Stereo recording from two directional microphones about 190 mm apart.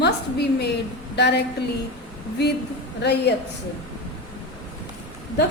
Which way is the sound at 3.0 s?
60° left (ahead or behind).